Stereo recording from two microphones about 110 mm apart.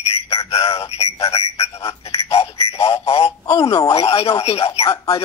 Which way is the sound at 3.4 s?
35° left (ahead or behind).